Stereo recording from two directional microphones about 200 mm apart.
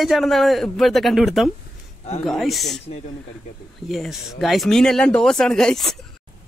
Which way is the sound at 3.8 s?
Centre (ahead or behind).